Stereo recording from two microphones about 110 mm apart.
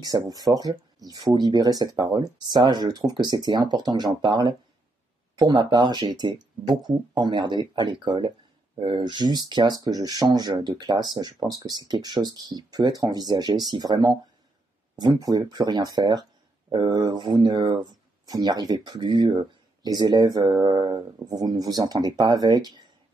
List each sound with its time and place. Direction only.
0.0 s speech: 35° right (ahead or behind)